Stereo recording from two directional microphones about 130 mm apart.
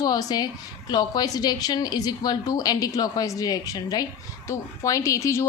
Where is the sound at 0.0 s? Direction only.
30° left (ahead or behind).